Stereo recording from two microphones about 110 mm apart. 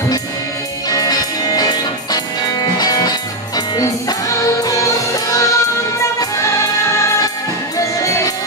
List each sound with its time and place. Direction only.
0.8 s music: 35° left (ahead or behind)
7.7 s music: 30° left (ahead or behind)